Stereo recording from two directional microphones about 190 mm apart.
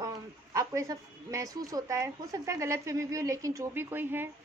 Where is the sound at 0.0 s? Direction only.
15° right (ahead or behind).